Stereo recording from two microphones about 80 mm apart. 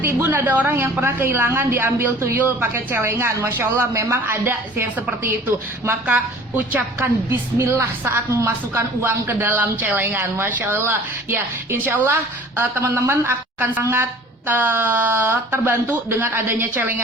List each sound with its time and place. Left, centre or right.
0.0 s a woman's voice: right
7.3 s a woman's voice: right